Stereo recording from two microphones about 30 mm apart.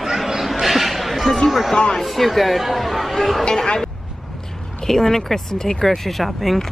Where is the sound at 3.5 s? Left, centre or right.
Left.